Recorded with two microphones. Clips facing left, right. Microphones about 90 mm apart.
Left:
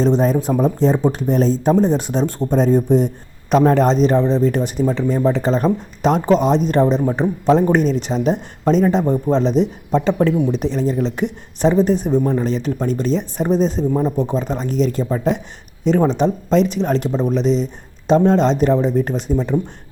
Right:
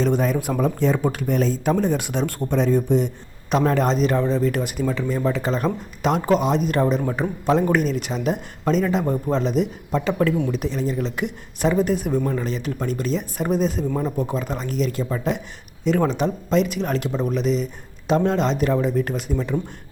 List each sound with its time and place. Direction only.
0.0 s speech: 35° left (ahead or behind)